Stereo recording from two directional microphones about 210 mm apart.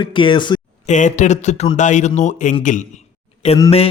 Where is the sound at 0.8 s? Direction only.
35° left (ahead or behind).